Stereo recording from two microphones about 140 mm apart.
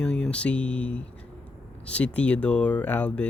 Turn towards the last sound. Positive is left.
turn(degrees=10)  # may be behind; listen again after turning